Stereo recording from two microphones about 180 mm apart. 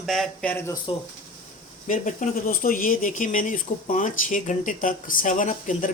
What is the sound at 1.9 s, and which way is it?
Speech, 45° left (ahead or behind).